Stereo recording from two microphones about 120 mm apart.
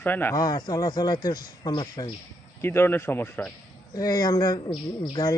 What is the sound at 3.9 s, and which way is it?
Speech, 30° left (ahead or behind).